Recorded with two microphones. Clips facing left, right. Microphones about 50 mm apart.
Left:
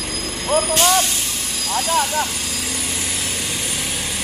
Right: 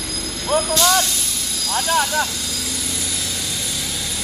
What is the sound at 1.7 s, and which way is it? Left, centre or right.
Vehicle, right.